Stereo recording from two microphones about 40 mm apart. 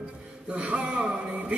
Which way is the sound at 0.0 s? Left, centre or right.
Right.